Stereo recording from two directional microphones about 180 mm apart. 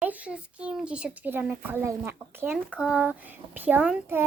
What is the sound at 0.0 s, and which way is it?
A child's voice, 10° right (ahead or behind).